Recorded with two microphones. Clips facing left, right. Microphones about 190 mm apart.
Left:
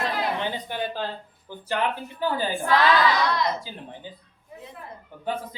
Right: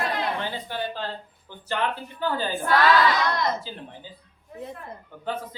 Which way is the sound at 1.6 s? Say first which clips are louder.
Left 1 dB; 15° left (ahead or behind).